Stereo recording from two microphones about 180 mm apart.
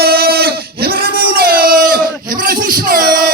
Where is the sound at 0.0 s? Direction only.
60° right (ahead or behind).